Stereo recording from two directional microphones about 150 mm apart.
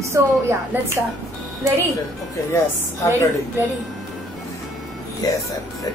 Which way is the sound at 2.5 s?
20° left (ahead or behind).